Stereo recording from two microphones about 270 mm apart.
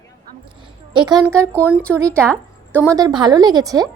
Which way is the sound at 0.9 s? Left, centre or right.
Centre.